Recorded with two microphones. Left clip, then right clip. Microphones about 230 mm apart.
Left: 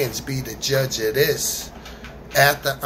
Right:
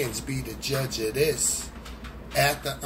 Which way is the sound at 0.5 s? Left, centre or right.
Centre.